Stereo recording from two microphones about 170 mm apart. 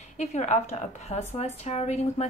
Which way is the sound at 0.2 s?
45° left (ahead or behind).